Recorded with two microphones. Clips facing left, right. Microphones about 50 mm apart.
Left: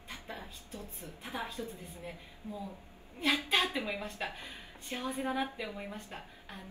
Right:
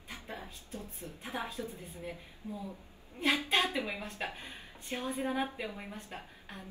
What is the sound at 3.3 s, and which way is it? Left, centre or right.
A woman's voice, right.